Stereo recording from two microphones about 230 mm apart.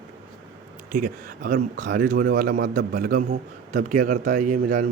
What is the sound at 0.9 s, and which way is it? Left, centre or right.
Speech, right.